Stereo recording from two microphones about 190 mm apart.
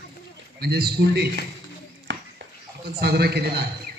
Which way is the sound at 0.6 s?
55° right (ahead or behind).